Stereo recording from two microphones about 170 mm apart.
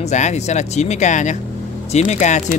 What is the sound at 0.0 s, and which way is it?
Speech, 45° left (ahead or behind).